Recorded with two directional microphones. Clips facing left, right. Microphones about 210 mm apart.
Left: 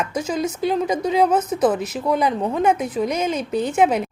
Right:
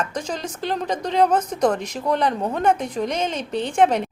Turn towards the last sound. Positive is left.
turn(degrees=10)  # may be behind; listen again after turning